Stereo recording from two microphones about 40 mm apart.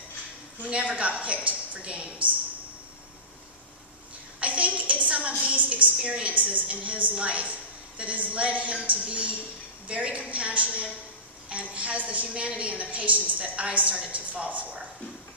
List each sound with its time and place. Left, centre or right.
0.7 s a woman's voice: right
4.4 s a sound: right
6.1 s a woman's voice: right